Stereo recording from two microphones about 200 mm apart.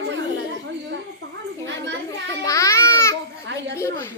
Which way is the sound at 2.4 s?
15° left (ahead or behind).